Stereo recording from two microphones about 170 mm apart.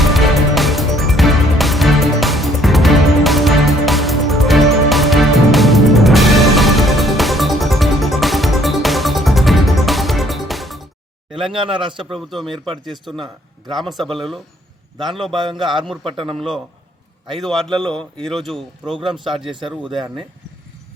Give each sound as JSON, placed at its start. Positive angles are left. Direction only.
{"t": 0.0, "sound": "music", "side_deg": 0}
{"t": 11.4, "sound": "speech", "side_deg": -30}
{"t": 12.1, "sound": "speech", "side_deg": 0}
{"t": 15.3, "sound": "speech", "side_deg": -30}
{"t": 17.4, "sound": "speech", "side_deg": 0}
{"t": 19.5, "sound": "speech", "side_deg": -30}